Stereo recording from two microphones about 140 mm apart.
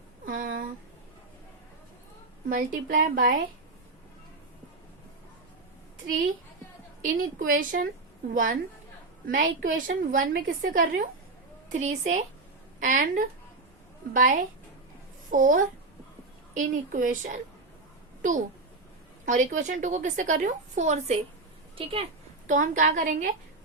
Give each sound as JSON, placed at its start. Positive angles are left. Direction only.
{"t": 0.3, "sound": "a sound", "side_deg": -75}
{"t": 2.6, "sound": "a woman's voice", "side_deg": -70}
{"t": 7.0, "sound": "a woman's voice", "side_deg": -75}
{"t": 9.2, "sound": "a woman's voice", "side_deg": -80}
{"t": 11.7, "sound": "a woman's voice", "side_deg": -55}
{"t": 12.8, "sound": "a woman's voice", "side_deg": -70}
{"t": 21.8, "sound": "speech", "side_deg": -40}
{"t": 22.4, "sound": "a woman's voice", "side_deg": -65}